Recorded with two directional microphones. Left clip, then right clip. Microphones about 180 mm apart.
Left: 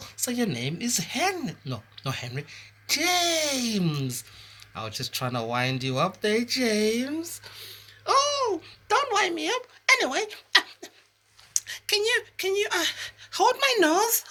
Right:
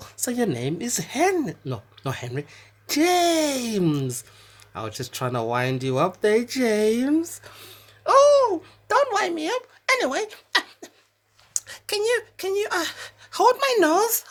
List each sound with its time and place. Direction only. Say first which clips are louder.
0.0 s speech: right 4 dB; 50° right (ahead or behind)